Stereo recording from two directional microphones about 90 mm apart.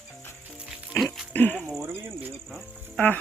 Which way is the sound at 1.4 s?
20° left (ahead or behind).